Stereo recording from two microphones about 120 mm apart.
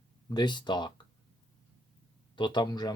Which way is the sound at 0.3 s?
40° left (ahead or behind).